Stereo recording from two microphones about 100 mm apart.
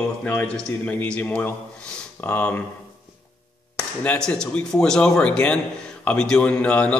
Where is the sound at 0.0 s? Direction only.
15° left (ahead or behind).